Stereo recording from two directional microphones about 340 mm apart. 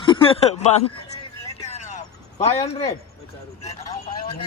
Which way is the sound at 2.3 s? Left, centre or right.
Centre.